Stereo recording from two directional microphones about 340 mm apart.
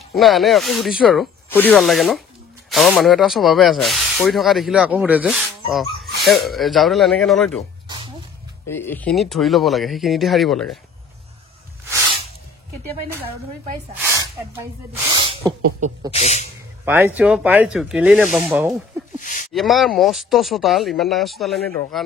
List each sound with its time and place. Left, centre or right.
0.1 s speech: centre
8.6 s speech: centre
13.9 s speech: centre
16.1 s a man's voice: centre
16.8 s speech: centre
19.1 s a sound: left
19.5 s speech: centre